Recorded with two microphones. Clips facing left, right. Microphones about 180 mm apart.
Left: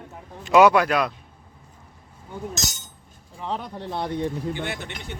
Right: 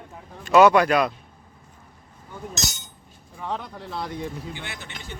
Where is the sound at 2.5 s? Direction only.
45° left (ahead or behind).